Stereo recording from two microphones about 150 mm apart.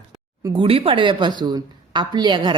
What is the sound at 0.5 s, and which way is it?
A woman's voice, 35° right (ahead or behind).